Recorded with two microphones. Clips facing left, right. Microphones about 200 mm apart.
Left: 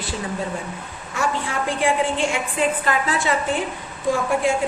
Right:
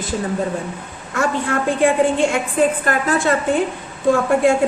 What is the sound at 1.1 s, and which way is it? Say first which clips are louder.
A woman's voice: right 5 dB; 55° right (ahead or behind).